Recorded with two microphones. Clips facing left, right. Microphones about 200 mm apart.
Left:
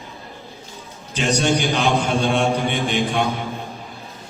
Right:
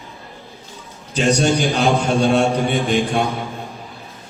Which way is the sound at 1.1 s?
35° right (ahead or behind).